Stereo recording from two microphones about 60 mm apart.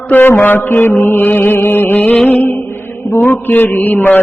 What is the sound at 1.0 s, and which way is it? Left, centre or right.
Chant, left.